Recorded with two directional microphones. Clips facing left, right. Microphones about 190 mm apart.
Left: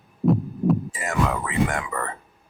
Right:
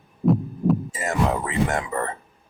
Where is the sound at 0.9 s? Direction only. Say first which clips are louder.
Right 2 dB; 30° right (ahead or behind).